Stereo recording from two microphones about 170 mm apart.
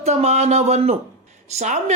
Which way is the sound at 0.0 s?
40° right (ahead or behind).